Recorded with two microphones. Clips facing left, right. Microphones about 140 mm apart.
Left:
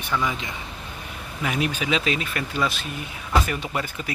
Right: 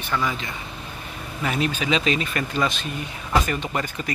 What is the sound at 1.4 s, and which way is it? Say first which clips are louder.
Speech: right 1 dB; 10° left (ahead or behind).